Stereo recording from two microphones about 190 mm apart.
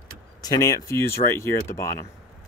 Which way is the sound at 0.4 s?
20° left (ahead or behind).